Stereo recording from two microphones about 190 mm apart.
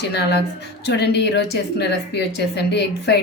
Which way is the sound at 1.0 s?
60° left (ahead or behind).